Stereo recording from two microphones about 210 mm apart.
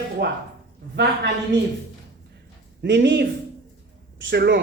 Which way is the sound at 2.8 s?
55° right (ahead or behind).